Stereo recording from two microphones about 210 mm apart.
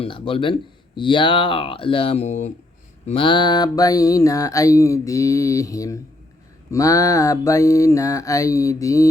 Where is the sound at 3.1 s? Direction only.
25° left (ahead or behind).